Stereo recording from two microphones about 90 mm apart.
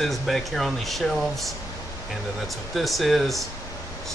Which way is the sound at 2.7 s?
Centre (ahead or behind).